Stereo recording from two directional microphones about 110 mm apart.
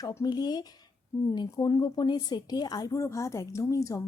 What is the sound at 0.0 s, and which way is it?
A woman's voice, 30° left (ahead or behind).